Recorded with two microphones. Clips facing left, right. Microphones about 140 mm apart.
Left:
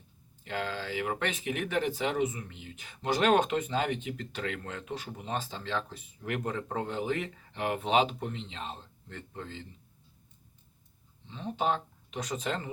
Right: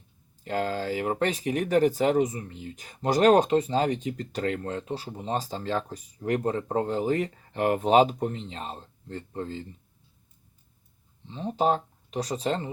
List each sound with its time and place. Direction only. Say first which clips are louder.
0.4 s speech: right 7 dB; 40° right (ahead or behind)
11.3 s speech: right 6 dB; 35° right (ahead or behind)